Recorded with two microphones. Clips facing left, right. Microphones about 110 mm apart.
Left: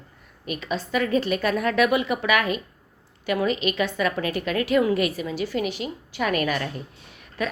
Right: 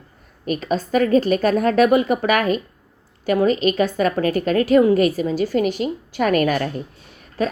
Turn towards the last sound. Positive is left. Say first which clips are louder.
# right 6 dB
turn(degrees=-35)  # may be behind; listen again after turning